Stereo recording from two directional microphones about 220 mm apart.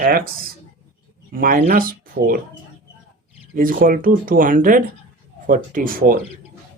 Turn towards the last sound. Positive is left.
turn(degrees=-40)  # may be behind; listen again after turning